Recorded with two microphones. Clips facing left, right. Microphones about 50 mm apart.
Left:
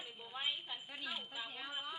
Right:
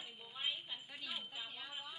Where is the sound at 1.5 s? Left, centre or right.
Left.